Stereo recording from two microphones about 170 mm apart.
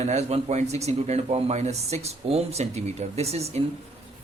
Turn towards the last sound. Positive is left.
turn(degrees=-40)  # may be behind; listen again after turning